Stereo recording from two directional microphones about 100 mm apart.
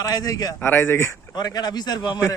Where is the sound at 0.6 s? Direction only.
20° left (ahead or behind).